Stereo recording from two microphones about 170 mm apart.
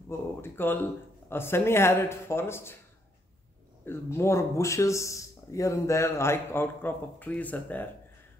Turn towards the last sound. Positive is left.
turn(degrees=10)  # may be behind; listen again after turning